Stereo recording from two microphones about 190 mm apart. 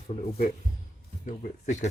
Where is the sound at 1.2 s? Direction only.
40° left (ahead or behind).